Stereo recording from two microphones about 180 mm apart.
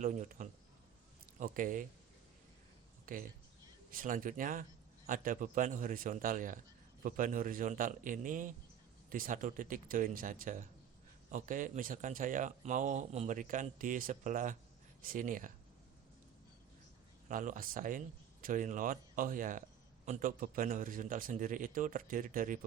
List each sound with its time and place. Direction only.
0.0 s a man's voice: 45° right (ahead or behind)
3.1 s a man's voice: 50° right (ahead or behind)
17.2 s a man's voice: 45° right (ahead or behind)